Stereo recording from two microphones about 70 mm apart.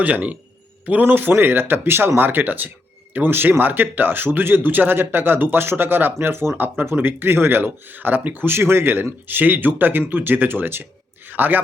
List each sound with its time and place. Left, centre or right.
0.0 s speech: right